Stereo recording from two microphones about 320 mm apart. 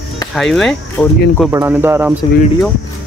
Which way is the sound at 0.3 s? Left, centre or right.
Centre.